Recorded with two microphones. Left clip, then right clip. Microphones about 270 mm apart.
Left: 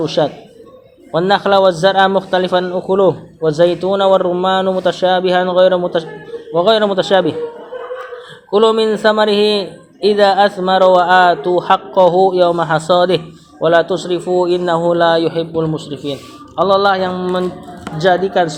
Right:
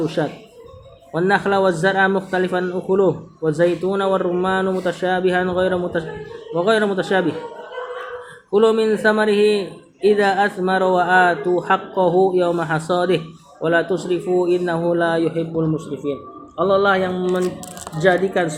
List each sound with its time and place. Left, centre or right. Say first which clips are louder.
0.0 s a man's voice: left 7 dB; centre
8.5 s a man's voice: left 4 dB; centre
16.6 s mantra: left 4 dB; left
17.8 s speech: left 4 dB; centre